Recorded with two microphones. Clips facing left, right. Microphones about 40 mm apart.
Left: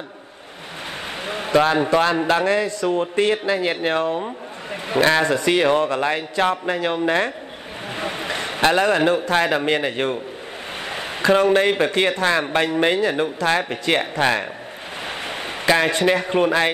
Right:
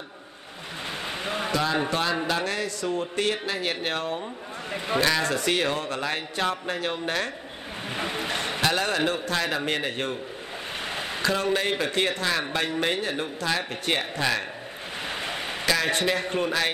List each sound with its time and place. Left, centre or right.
1.4 s speech: left
4.7 s a man's voice: left
11.1 s speech: left
12.9 s speech: left
15.3 s a sound: left
15.9 s speech: left